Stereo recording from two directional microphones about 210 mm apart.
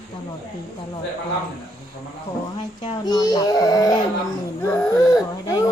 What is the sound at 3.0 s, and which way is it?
A child's voice, 20° left (ahead or behind).